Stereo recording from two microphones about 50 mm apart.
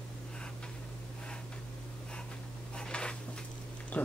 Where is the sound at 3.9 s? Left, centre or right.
Left.